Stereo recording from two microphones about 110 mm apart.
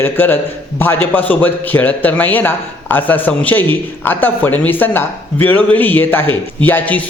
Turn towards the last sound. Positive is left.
turn(degrees=15)  # may be behind; listen again after turning